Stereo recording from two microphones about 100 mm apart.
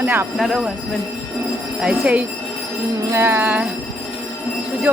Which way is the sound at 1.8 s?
10° right (ahead or behind).